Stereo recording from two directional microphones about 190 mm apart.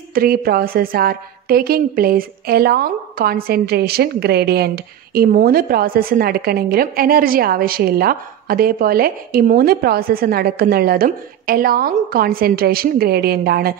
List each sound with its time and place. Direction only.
0.1 s a woman's voice: 50° right (ahead or behind)